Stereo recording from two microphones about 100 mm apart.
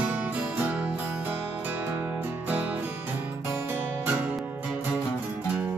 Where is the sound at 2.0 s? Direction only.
15° right (ahead or behind).